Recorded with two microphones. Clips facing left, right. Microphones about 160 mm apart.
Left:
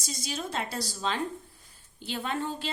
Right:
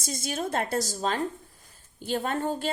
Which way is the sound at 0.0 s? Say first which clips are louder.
Right 4 dB; 50° right (ahead or behind).